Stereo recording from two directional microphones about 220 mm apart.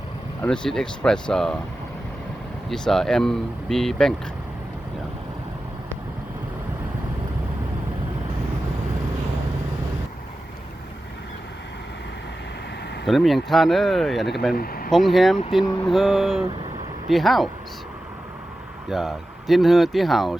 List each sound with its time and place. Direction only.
0.4 s speech: 5° left (ahead or behind)
2.6 s speech: centre (ahead or behind)
13.1 s speech: centre (ahead or behind)
14.5 s speech: 40° left (ahead or behind)
14.8 s speech: centre (ahead or behind)
18.9 s speech: centre (ahead or behind)